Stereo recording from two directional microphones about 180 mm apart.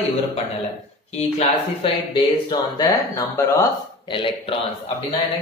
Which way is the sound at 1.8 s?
25° left (ahead or behind).